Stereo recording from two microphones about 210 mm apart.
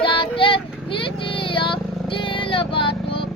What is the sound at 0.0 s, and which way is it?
Child singing, 25° left (ahead or behind).